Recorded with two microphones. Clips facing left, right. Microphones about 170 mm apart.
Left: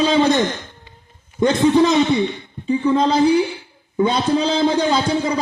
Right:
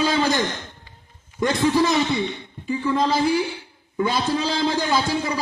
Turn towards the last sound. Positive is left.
turn(degrees=20)  # may be behind; listen again after turning